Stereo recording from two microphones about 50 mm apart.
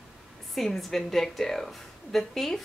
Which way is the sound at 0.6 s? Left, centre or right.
Centre.